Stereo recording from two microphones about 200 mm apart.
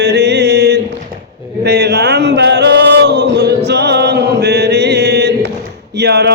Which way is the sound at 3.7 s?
55° right (ahead or behind).